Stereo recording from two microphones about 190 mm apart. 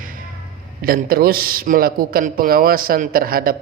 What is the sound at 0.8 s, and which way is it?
A man's voice, 50° right (ahead or behind).